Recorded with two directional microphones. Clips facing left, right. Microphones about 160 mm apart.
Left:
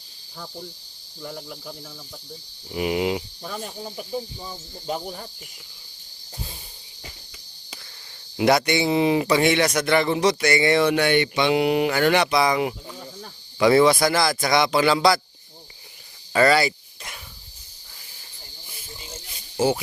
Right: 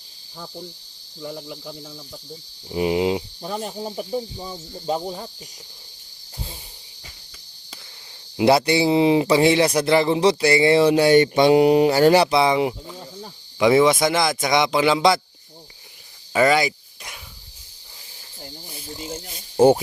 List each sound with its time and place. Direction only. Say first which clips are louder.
1.2 s speech: right 3 dB; 15° right (ahead or behind)
2.6 s a man's voice: right 3 dB; 25° right (ahead or behind)
8.4 s a man's voice: right 3 dB; 30° right (ahead or behind)
16.3 s speech: even; 15° right (ahead or behind)